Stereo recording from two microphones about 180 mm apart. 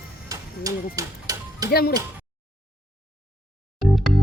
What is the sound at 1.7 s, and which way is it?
Speech, 55° left (ahead or behind).